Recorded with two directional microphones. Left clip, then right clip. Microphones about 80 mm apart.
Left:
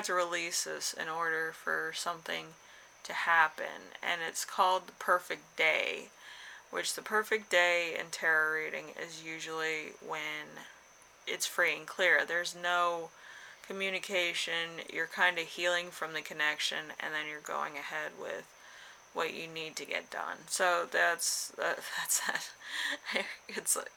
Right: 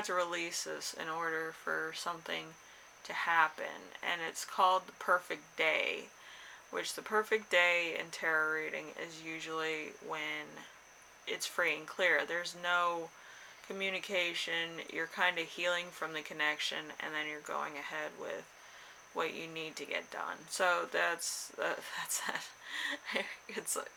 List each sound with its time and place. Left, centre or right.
0.0 s speech: left